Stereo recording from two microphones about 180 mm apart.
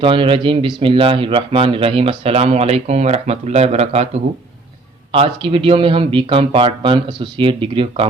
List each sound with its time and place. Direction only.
0.0 s speech: 30° right (ahead or behind)
5.1 s speech: 30° right (ahead or behind)